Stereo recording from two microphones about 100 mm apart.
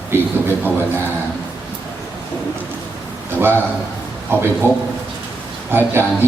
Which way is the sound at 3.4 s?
20° right (ahead or behind).